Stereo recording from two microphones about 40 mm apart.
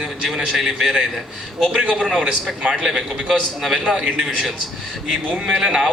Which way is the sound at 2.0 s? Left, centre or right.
Centre.